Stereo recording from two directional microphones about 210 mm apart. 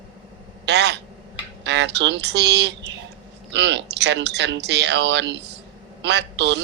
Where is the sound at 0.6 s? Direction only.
55° right (ahead or behind).